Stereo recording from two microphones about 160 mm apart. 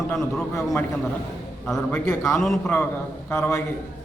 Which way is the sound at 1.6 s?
5° left (ahead or behind).